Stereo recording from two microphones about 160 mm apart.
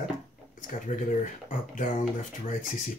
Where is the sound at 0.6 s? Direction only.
50° left (ahead or behind).